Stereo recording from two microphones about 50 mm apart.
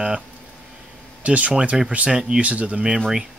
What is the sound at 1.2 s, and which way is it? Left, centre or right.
Speech, right.